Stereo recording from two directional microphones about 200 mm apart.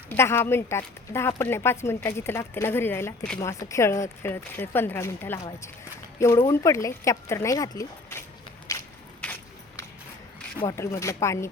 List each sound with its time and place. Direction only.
0.1 s speech: 10° left (ahead or behind)
8.7 s biting: 15° left (ahead or behind)
9.2 s a sound: 10° left (ahead or behind)
10.6 s speech: 15° left (ahead or behind)